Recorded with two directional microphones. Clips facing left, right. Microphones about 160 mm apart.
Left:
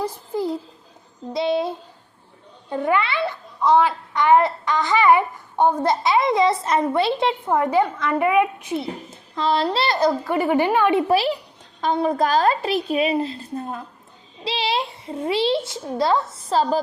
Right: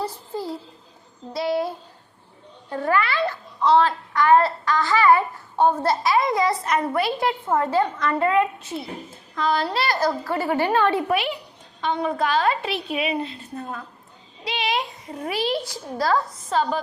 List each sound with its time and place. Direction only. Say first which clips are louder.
0.0 s a sound: left 4 dB; 15° left (ahead or behind)
3.6 s a child's voice: left 1 dB; 10° left (ahead or behind)
11.1 s a woman's voice: left 4 dB; 35° left (ahead or behind)